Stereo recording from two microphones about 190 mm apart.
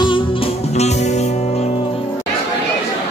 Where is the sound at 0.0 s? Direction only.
30° left (ahead or behind).